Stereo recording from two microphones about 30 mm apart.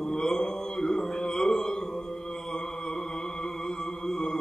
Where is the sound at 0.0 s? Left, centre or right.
Left.